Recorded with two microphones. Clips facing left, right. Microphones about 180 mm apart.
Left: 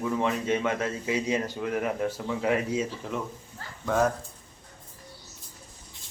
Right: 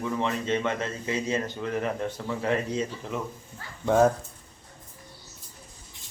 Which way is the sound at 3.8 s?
25° right (ahead or behind).